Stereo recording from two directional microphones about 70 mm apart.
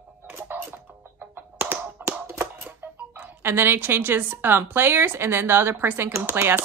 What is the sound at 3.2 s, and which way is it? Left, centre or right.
Speech, right.